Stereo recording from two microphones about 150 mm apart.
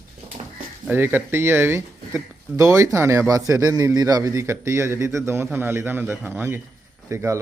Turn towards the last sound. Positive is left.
turn(degrees=-20)  # may be behind; listen again after turning